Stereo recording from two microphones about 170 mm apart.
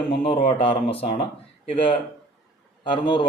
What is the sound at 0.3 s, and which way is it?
Speech, 35° left (ahead or behind).